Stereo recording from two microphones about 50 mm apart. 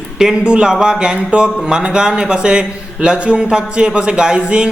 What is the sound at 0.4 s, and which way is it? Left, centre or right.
Speech, centre.